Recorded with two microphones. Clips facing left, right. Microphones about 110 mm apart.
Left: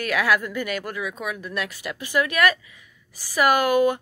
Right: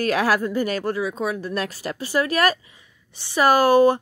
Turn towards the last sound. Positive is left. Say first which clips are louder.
# right 4 dB
turn(degrees=-35)  # may be behind; listen again after turning